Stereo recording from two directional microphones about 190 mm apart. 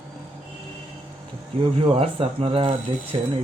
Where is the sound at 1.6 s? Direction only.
30° right (ahead or behind).